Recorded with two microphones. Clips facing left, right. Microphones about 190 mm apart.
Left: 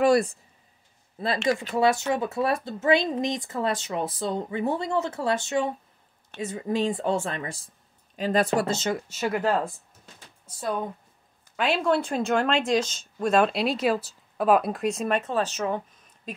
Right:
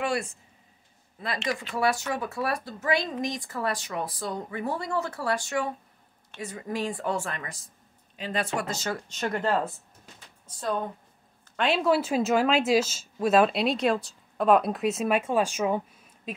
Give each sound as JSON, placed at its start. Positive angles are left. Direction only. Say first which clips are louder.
{"t": 0.0, "sound": "speech", "louder": "left 9 dB", "side_deg": 40}
{"t": 1.2, "sound": "speech", "louder": "left 6 dB", "side_deg": 25}
{"t": 8.2, "sound": "speech", "louder": "left 7 dB", "side_deg": 40}
{"t": 9.1, "sound": "speech", "louder": "left 1 dB", "side_deg": 5}